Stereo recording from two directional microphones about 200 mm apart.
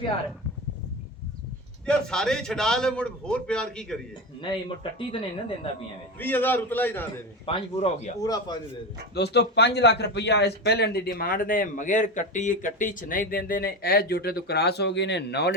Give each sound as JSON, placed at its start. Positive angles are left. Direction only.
{"t": 1.9, "sound": "a man's voice", "side_deg": 5}
{"t": 4.4, "sound": "speech", "side_deg": 25}
{"t": 6.1, "sound": "a man's voice", "side_deg": 10}
{"t": 7.4, "sound": "speech", "side_deg": 30}
{"t": 9.1, "sound": "a man's voice", "side_deg": 55}